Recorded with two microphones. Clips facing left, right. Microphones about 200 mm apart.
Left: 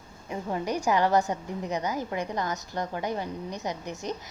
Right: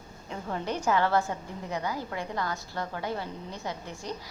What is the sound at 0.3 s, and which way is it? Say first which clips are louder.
A woman's voice: left 3 dB; 15° left (ahead or behind).